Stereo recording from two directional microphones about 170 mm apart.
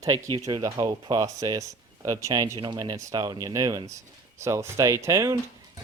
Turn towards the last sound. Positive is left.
turn(degrees=-20)  # may be behind; listen again after turning